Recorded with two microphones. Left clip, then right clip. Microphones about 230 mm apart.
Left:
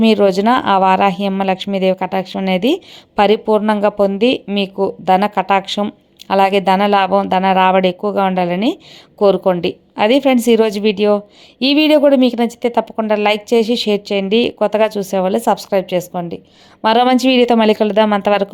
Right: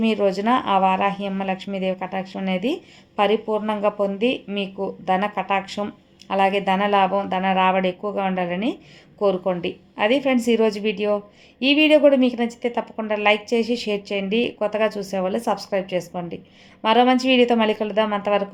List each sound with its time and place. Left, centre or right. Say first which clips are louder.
0.0 s speech: left 8 dB; left